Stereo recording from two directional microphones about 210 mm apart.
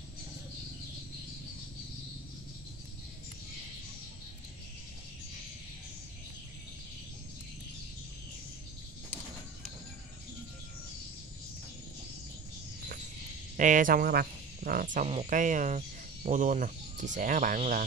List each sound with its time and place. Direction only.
13.6 s speech: 40° right (ahead or behind)